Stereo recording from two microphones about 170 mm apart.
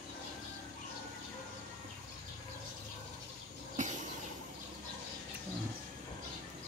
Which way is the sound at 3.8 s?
45° right (ahead or behind).